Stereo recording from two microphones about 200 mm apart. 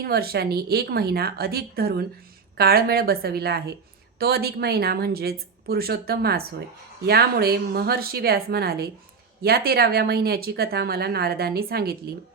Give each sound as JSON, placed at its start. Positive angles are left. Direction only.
{"t": 0.0, "sound": "speech", "side_deg": -50}